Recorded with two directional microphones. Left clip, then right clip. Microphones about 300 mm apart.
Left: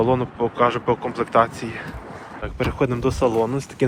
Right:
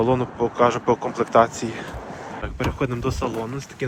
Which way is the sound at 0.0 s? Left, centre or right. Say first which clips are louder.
Left 1 dB; centre.